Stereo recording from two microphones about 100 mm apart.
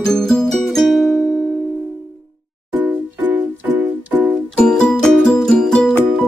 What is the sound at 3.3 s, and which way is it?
Music, 20° right (ahead or behind).